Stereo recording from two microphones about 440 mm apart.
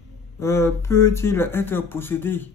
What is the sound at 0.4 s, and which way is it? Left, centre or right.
Speech, centre.